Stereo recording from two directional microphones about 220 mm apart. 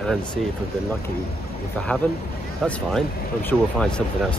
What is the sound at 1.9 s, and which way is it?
Speech, 5° left (ahead or behind).